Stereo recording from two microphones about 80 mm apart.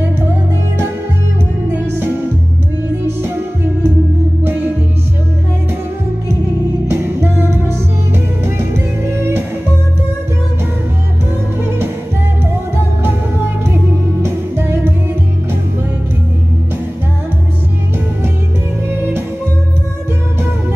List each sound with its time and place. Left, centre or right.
6.9 s music: right
14.2 s music: right